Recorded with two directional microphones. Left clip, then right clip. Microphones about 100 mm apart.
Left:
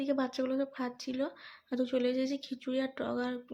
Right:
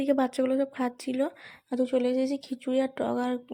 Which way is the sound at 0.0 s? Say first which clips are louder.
Right 7 dB; 55° right (ahead or behind).